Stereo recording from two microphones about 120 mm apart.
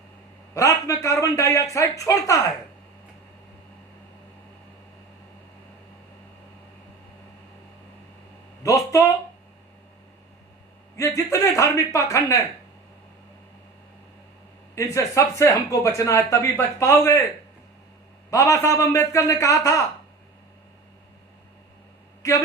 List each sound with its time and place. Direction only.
0.5 s speech: 25° left (ahead or behind)
8.6 s a sound: 25° left (ahead or behind)
10.9 s speech: 25° left (ahead or behind)
14.8 s speech: 25° left (ahead or behind)
18.3 s speech: 25° left (ahead or behind)
22.2 s a man's voice: 25° left (ahead or behind)